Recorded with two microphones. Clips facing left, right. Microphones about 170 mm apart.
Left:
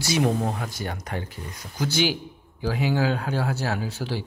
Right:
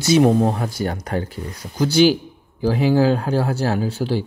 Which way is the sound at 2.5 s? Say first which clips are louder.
Right 8 dB; 35° right (ahead or behind).